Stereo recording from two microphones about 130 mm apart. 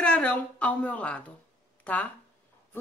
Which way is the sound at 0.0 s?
10° left (ahead or behind).